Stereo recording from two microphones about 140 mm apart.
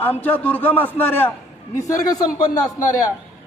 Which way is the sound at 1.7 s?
25° left (ahead or behind).